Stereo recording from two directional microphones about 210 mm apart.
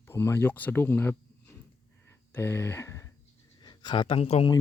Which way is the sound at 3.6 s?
20° left (ahead or behind).